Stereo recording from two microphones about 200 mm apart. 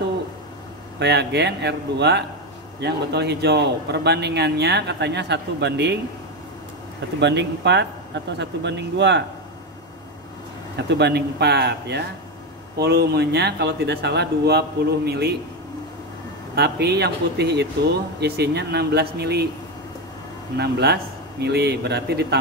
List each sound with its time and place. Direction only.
0.9 s a man's voice: 60° right (ahead or behind)
7.2 s a man's voice: 60° right (ahead or behind)
10.8 s a man's voice: 60° right (ahead or behind)
16.5 s a man's voice: 55° right (ahead or behind)
20.5 s a man's voice: 55° right (ahead or behind)